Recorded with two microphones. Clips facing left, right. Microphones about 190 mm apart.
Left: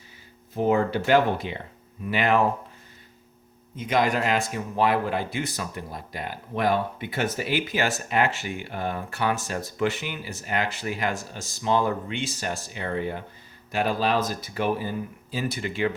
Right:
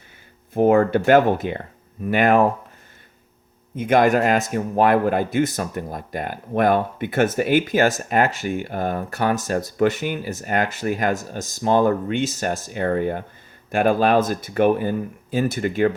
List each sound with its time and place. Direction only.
0.5 s a man's voice: 55° right (ahead or behind)
3.8 s a man's voice: 55° right (ahead or behind)